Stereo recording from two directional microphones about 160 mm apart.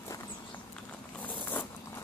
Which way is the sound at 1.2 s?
10° left (ahead or behind).